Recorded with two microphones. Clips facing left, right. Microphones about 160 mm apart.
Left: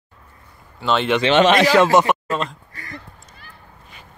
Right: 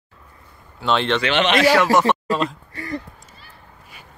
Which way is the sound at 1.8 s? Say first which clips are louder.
Left 2 dB; 20° left (ahead or behind).